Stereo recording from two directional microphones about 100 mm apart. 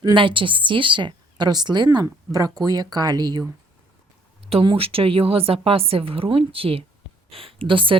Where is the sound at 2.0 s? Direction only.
35° right (ahead or behind).